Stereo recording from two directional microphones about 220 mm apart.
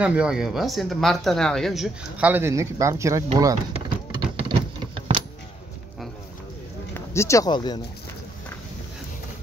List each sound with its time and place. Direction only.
0.0 s speech: 5° right (ahead or behind)
4.5 s a sound: 25° right (ahead or behind)
6.9 s speech: 15° left (ahead or behind)